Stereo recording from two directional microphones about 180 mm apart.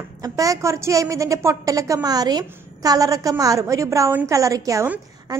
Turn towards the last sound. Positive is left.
turn(degrees=-15)  # may be behind; listen again after turning